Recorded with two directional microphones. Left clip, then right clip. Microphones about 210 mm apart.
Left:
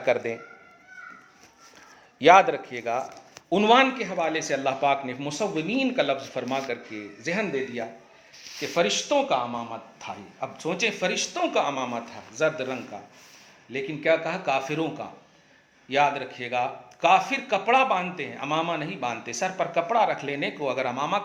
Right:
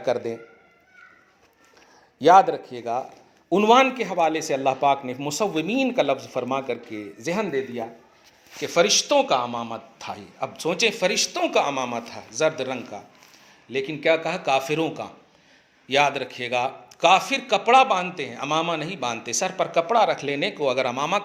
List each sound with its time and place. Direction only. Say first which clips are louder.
0.0 s speech: even; 30° right (ahead or behind)
2.1 s a man's voice: right 1 dB; 25° right (ahead or behind)